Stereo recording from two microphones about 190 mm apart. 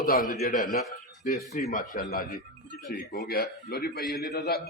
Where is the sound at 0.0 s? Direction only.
50° left (ahead or behind).